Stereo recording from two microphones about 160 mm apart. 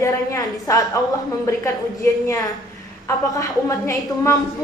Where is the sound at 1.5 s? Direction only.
20° left (ahead or behind).